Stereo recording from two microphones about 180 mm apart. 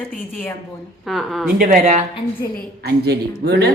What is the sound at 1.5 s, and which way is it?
Speech, 50° right (ahead or behind).